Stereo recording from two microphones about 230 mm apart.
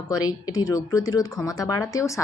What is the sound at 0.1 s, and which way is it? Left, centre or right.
Speech, centre.